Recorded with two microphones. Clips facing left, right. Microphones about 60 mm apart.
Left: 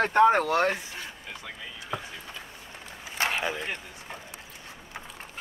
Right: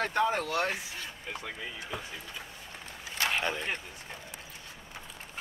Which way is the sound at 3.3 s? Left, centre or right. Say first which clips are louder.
Left 1 dB; centre.